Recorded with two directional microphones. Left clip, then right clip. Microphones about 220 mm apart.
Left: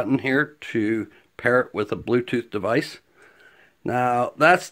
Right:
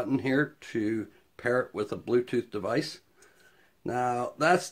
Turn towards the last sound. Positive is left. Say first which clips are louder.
# left 8 dB
turn(degrees=45)  # may be behind; listen again after turning